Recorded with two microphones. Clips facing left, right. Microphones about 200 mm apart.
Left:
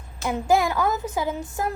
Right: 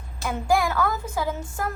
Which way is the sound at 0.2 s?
20° left (ahead or behind).